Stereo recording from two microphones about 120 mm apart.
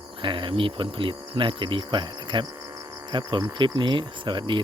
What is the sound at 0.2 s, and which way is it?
Speech, 45° right (ahead or behind).